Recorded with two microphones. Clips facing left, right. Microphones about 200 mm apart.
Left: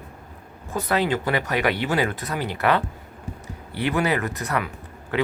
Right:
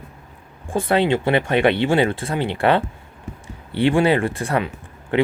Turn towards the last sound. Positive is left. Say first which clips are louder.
# right 5 dB
turn(degrees=-25)  # may be behind; listen again after turning